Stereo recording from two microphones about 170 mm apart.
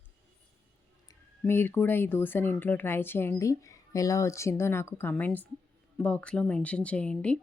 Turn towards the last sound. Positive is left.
turn(degrees=5)  # may be behind; listen again after turning